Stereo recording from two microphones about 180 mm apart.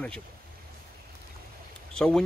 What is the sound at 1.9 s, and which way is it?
Speech, 5° left (ahead or behind).